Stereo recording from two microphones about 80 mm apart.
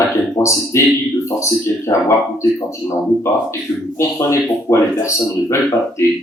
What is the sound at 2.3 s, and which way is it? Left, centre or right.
Speech, left.